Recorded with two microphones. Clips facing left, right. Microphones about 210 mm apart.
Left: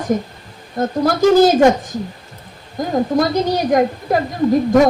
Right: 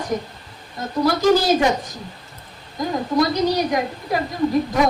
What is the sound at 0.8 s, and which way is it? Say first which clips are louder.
Speech: left 4 dB; 50° left (ahead or behind).